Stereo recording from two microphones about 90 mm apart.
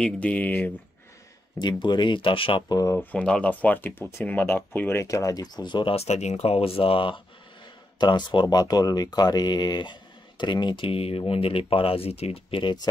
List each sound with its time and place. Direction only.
0.0 s speech: 15° left (ahead or behind)
1.6 s speech: 55° left (ahead or behind); by 2.6 s 75° left (ahead or behind)
2.9 s speech: 20° left (ahead or behind)
4.9 s speech: 35° left (ahead or behind); by 7.2 s 85° left
8.0 s speech: 60° left (ahead or behind); by 12.7 s 80° left